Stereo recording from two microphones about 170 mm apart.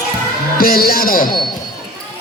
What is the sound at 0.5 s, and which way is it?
Speech, 60° left (ahead or behind).